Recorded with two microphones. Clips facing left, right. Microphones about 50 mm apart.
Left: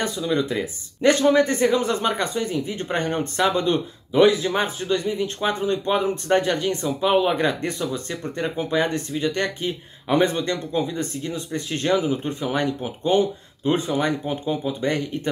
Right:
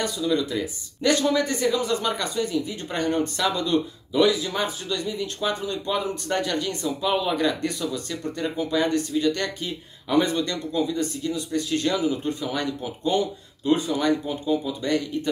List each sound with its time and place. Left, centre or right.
0.0 s speech: left